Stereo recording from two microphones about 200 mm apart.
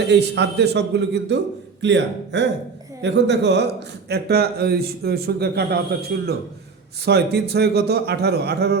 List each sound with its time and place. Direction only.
0.1 s a man's voice: 60° right (ahead or behind)